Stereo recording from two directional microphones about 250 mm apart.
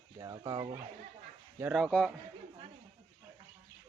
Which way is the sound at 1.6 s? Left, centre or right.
Centre.